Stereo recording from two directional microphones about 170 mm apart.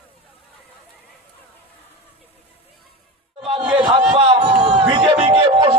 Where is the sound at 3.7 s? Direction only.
30° right (ahead or behind).